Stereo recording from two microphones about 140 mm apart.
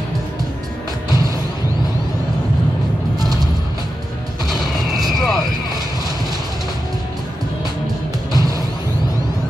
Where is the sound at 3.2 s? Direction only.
25° right (ahead or behind).